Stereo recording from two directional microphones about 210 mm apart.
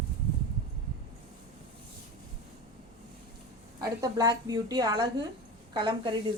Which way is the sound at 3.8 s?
20° right (ahead or behind).